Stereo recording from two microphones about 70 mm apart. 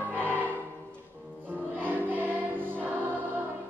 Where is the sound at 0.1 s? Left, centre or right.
Right.